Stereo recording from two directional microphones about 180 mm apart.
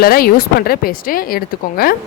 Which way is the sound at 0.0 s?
55° left (ahead or behind).